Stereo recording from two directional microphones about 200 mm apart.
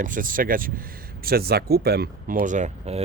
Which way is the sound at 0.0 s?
45° right (ahead or behind).